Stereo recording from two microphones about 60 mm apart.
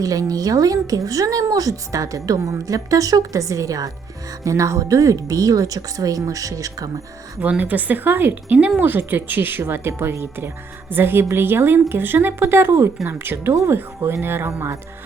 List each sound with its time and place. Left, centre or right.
0.0 s speech: right
7.4 s speech: right
8.5 s speech: right
8.8 s speech: right